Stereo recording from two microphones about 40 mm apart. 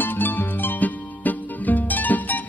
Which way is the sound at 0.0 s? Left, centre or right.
Left.